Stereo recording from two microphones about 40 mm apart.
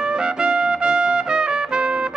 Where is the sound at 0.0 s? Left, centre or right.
Right.